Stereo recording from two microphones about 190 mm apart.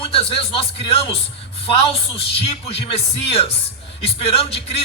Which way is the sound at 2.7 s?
30° left (ahead or behind).